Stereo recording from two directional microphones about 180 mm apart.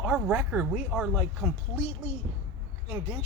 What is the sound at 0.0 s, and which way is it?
Speech, 5° right (ahead or behind).